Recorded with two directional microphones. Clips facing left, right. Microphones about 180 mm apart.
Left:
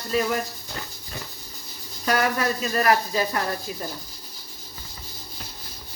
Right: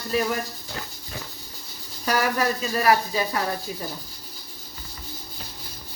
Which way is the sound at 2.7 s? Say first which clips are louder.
Even; 5° right (ahead or behind).